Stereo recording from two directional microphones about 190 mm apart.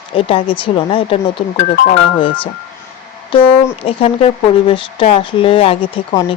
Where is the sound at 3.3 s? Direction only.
25° left (ahead or behind).